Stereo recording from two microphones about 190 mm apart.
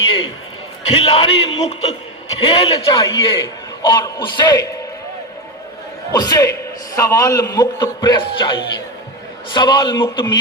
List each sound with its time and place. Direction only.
0.9 s a man's voice: 30° left (ahead or behind)
6.1 s a man's voice: 20° left (ahead or behind)